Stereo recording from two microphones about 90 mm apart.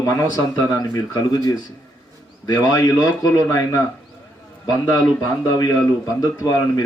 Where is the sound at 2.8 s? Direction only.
40° left (ahead or behind).